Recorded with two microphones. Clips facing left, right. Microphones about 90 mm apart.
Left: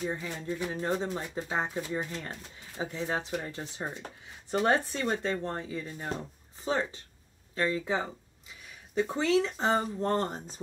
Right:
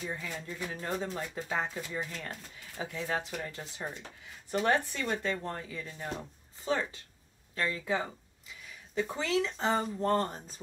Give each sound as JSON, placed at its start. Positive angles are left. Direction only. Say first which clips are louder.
{"t": 0.0, "sound": "speech", "louder": "left 4 dB", "side_deg": 30}
{"t": 9.1, "sound": "speech", "louder": "left 5 dB", "side_deg": 35}